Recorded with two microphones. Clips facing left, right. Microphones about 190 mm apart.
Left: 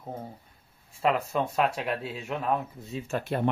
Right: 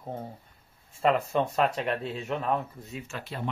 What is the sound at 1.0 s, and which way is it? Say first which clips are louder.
Speech: right 1 dB; 5° left (ahead or behind).